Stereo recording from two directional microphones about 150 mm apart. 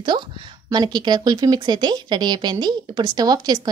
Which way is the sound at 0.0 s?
30° right (ahead or behind).